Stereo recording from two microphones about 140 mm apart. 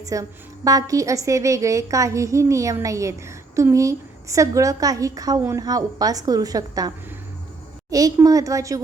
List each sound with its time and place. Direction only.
0.0 s a woman's voice: 25° right (ahead or behind)